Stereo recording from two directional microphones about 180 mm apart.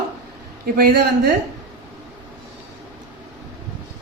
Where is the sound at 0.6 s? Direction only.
55° right (ahead or behind).